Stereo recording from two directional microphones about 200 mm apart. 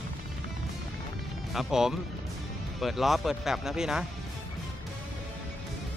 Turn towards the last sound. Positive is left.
turn(degrees=0)  # may be behind; listen again after turning